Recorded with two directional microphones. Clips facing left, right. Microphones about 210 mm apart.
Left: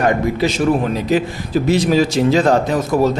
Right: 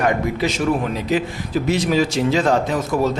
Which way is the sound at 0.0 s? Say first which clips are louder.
Left 3 dB; 35° left (ahead or behind).